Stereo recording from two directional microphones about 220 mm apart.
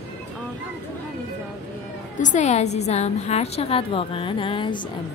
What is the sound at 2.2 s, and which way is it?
A woman's voice, 35° left (ahead or behind).